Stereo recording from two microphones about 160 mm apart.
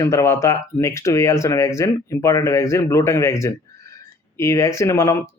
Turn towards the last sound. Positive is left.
turn(degrees=15)  # may be behind; listen again after turning